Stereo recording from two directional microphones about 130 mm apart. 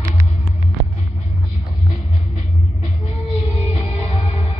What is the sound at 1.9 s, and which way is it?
Music, 55° left (ahead or behind).